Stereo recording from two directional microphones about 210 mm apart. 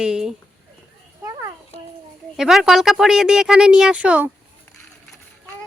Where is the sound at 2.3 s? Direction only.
Centre (ahead or behind).